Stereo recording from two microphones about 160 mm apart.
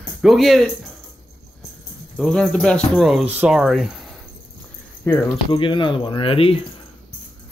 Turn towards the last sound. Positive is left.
turn(degrees=35)  # may be behind; listen again after turning